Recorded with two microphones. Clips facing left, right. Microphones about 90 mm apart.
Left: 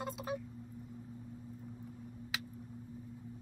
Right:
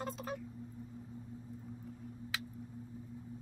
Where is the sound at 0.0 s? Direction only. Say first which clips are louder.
Left 1 dB; 10° left (ahead or behind).